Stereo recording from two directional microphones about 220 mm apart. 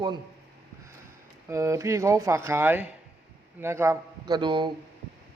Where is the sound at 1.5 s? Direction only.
15° right (ahead or behind).